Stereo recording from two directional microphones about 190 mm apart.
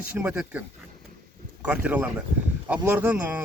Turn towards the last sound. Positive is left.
turn(degrees=-5)  # may be behind; listen again after turning